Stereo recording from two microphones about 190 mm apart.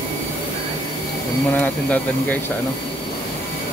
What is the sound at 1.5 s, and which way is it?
Speech, 10° left (ahead or behind).